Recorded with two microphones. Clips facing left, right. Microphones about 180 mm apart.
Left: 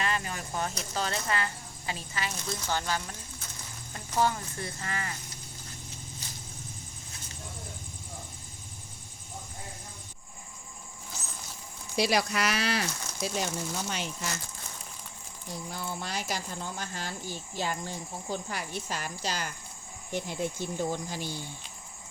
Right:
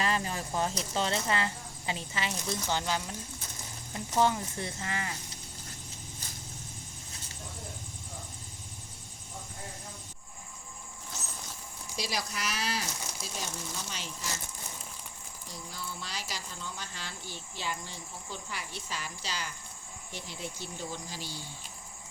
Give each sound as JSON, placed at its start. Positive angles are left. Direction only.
{"t": 0.0, "sound": "speech", "side_deg": -30}
{"t": 11.9, "sound": "speech", "side_deg": 65}
{"t": 13.9, "sound": "speech", "side_deg": 60}
{"t": 15.7, "sound": "speech", "side_deg": 55}